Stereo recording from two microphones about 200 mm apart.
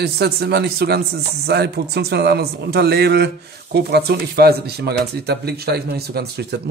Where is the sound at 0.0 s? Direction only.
55° right (ahead or behind).